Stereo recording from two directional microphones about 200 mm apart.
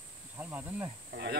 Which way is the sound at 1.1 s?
50° right (ahead or behind).